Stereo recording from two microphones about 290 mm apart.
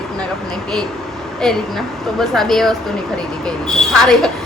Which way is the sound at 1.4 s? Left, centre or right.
Centre.